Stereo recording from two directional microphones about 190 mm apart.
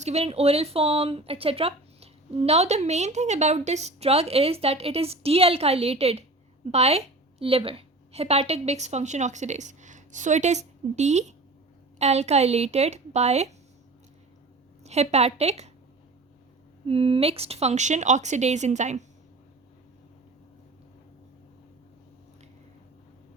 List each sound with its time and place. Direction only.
0.0 s a woman's voice: 35° right (ahead or behind)
14.8 s speech: 35° right (ahead or behind)
16.8 s speech: 30° right (ahead or behind)